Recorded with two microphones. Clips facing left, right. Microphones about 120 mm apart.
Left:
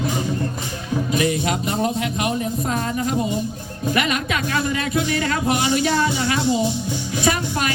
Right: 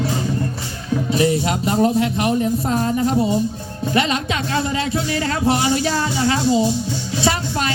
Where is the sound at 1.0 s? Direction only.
30° right (ahead or behind).